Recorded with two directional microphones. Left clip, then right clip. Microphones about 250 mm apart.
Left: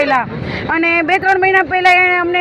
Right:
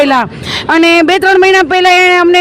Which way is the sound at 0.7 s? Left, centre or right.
Right.